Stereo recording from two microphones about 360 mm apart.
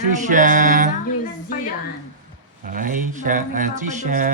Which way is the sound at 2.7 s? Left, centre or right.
Right.